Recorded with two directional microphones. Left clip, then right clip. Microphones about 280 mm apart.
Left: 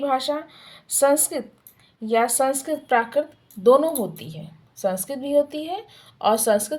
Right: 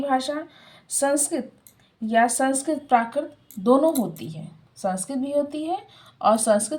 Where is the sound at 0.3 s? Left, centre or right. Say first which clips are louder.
Left 3 dB; left.